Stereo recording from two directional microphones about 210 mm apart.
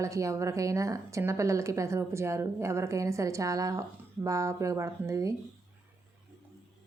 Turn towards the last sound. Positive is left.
turn(degrees=-15)  # may be behind; listen again after turning